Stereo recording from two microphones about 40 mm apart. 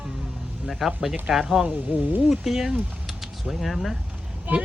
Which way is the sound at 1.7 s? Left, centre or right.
Right.